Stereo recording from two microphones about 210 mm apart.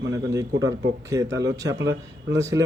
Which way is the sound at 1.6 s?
60° right (ahead or behind).